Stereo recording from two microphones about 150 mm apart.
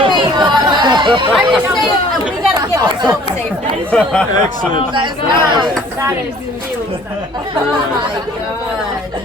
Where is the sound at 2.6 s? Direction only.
25° right (ahead or behind).